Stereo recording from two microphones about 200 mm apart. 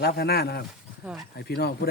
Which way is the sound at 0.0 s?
50° left (ahead or behind).